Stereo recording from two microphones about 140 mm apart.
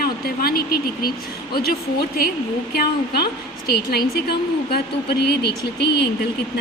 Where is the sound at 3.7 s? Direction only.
90° left.